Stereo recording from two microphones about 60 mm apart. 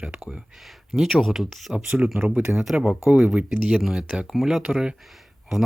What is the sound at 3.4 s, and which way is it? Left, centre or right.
Speech, right.